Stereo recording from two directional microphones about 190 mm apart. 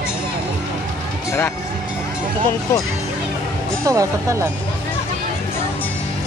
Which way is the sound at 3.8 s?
15° right (ahead or behind).